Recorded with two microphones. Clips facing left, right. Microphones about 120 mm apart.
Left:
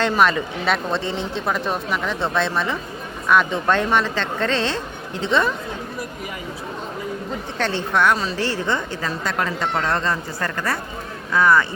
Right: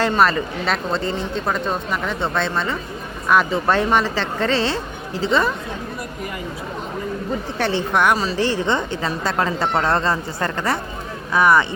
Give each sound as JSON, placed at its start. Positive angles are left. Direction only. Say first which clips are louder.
{"t": 0.0, "sound": "a woman's voice", "louder": "right 1 dB", "side_deg": 0}
{"t": 7.6, "sound": "a woman's voice", "louder": "right 1 dB", "side_deg": -15}